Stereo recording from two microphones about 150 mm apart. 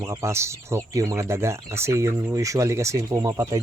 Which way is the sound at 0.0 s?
20° right (ahead or behind).